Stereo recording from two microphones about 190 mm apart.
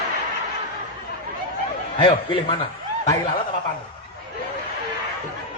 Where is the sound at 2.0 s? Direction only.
25° left (ahead or behind).